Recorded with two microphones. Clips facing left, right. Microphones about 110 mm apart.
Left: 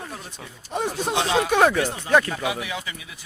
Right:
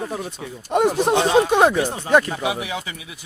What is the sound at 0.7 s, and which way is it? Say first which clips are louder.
Speech: right 8 dB; 65° right (ahead or behind).